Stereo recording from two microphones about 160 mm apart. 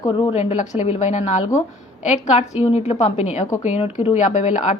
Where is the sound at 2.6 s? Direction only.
40° left (ahead or behind).